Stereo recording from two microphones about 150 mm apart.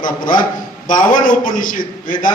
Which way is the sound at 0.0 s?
65° left (ahead or behind).